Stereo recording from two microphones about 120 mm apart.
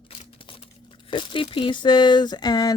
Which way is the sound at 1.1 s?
45° left (ahead or behind).